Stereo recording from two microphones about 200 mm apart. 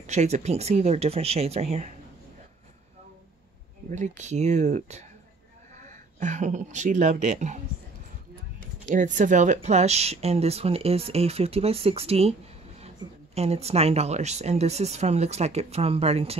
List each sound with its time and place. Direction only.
0.0 s speech: 35° right (ahead or behind)
3.9 s speech: 35° right (ahead or behind)
8.8 s speech: 40° right (ahead or behind)